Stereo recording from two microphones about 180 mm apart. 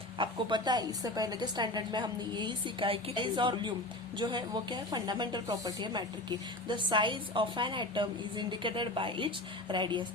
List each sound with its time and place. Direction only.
0.2 s a woman's voice: 25° right (ahead or behind)